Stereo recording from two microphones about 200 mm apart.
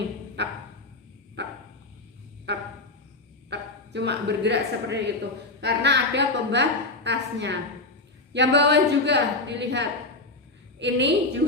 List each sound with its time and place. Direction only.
0.4 s dog: 60° right (ahead or behind)
2.5 s a sound: 60° right (ahead or behind)
3.5 s a woman's voice: 60° right (ahead or behind)